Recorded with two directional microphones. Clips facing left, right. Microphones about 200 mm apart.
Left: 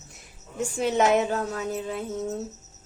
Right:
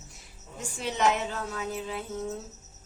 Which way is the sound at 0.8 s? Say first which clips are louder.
Left 6 dB; 50° left (ahead or behind).